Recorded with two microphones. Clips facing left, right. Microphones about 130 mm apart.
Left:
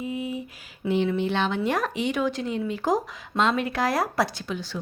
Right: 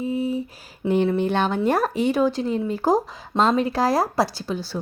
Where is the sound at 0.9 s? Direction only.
45° right (ahead or behind).